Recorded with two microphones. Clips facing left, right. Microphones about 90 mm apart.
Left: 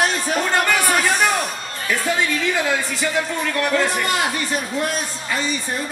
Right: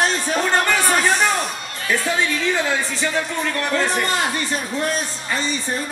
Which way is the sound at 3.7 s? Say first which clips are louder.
Right 1 dB; 35° right (ahead or behind).